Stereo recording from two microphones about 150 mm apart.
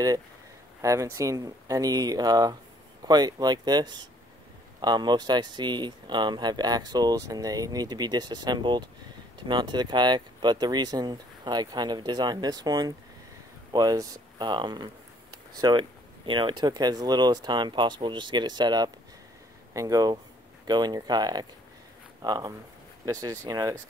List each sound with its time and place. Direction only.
0.8 s speech: 20° right (ahead or behind)